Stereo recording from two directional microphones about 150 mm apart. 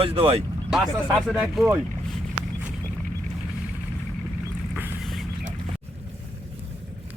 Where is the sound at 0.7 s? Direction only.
5° right (ahead or behind).